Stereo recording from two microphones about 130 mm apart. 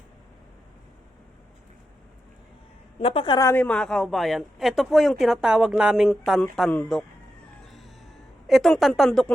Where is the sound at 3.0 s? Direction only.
45° left (ahead or behind).